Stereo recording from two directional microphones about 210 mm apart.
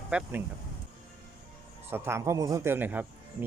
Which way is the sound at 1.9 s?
10° right (ahead or behind).